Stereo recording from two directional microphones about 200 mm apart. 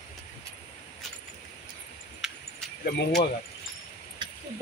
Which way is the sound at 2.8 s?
45° left (ahead or behind).